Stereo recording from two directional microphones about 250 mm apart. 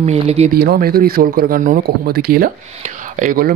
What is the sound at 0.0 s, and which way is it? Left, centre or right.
Speech, right.